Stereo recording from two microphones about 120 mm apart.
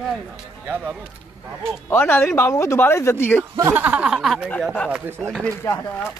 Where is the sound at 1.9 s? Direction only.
15° left (ahead or behind).